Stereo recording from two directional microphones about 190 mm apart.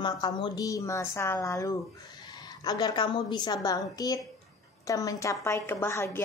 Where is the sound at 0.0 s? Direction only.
20° left (ahead or behind).